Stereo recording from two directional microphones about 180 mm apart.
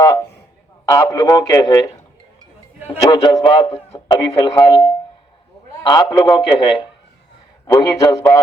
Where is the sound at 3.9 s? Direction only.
20° left (ahead or behind).